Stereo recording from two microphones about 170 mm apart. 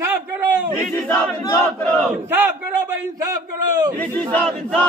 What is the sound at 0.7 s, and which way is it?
Battle cry, 10° left (ahead or behind).